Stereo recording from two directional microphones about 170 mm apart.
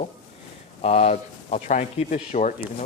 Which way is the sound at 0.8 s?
40° left (ahead or behind).